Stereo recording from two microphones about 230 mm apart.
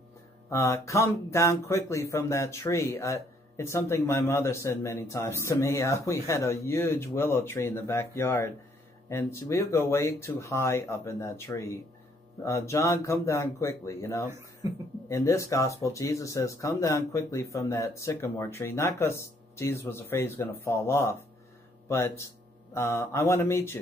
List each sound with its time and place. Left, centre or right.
0.5 s speech: centre
14.6 s speech: centre
15.0 s speech: centre